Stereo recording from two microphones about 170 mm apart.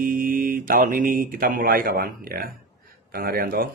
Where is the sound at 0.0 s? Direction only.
55° right (ahead or behind).